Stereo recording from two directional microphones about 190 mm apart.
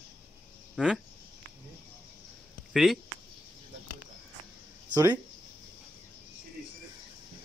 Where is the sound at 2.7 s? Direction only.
Centre (ahead or behind).